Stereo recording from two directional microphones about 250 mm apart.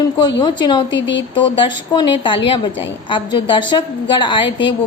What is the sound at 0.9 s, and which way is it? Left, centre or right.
Speech, left.